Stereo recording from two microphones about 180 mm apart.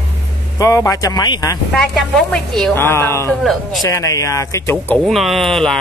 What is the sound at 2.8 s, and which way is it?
Speech, 15° left (ahead or behind).